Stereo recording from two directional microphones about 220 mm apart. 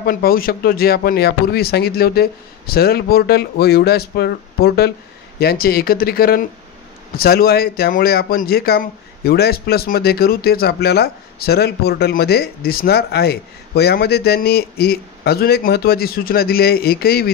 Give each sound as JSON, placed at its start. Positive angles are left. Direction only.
{"t": 0.0, "sound": "speech", "side_deg": 45}